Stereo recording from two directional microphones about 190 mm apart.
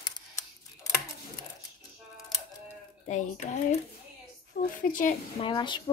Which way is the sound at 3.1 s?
40° left (ahead or behind).